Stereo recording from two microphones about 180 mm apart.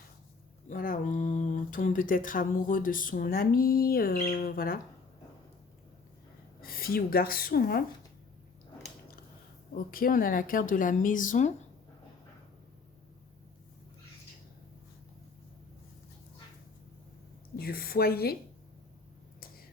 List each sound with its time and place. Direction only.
0.7 s speech: 50° left (ahead or behind)
6.6 s speech: 55° left (ahead or behind)
9.7 s speech: 50° left (ahead or behind)
17.6 s a woman's voice: 55° left (ahead or behind)